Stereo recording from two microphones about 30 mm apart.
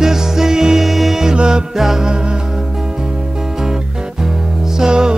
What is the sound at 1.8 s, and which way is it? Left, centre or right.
Music, centre.